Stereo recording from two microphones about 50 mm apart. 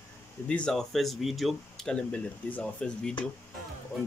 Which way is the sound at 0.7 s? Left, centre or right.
Centre.